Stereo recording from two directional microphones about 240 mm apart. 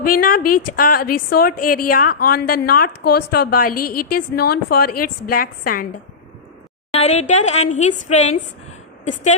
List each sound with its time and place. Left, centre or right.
0.0 s a woman's voice: left
6.9 s speech: left